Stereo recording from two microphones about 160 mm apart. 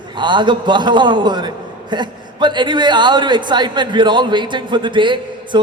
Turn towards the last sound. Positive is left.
turn(degrees=-30)  # may be behind; listen again after turning